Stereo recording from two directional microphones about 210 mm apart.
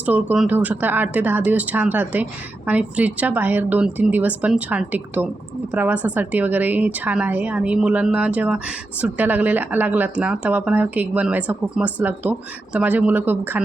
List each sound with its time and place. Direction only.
0.0 s a woman's voice: 5° right (ahead or behind)